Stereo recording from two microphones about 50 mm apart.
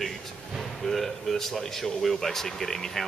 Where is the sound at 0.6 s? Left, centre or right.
Centre.